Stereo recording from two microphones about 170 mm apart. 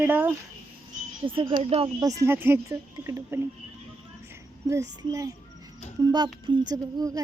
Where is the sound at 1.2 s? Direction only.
30° right (ahead or behind).